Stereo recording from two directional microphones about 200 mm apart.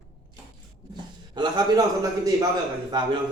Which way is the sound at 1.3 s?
20° right (ahead or behind).